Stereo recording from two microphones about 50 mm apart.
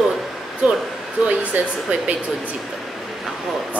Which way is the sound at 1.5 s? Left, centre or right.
Right.